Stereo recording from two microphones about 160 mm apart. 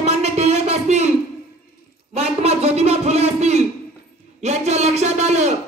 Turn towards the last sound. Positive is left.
turn(degrees=-45)  # may be behind; listen again after turning